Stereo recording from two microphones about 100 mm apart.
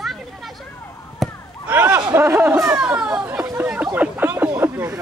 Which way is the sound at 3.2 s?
25° right (ahead or behind).